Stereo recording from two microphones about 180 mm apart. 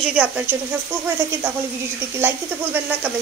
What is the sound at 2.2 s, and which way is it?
Speech, 10° right (ahead or behind).